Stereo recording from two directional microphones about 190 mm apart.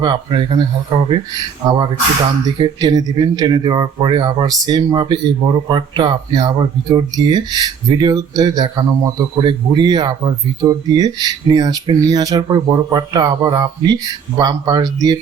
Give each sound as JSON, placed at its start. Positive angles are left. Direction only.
{"t": 0.0, "sound": "speech", "side_deg": -25}
{"t": 2.6, "sound": "speech", "side_deg": -20}